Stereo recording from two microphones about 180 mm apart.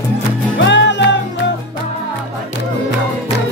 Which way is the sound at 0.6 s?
80° left.